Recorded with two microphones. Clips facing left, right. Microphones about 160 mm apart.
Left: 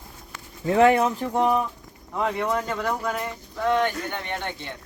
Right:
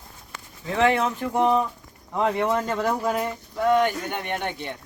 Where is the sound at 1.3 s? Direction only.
20° right (ahead or behind).